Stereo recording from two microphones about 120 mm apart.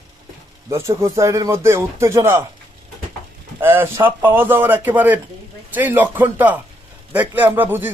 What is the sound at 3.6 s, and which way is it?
Speech, 20° right (ahead or behind).